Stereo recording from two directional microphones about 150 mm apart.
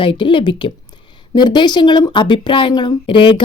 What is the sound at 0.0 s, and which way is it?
A woman's voice, 35° left (ahead or behind).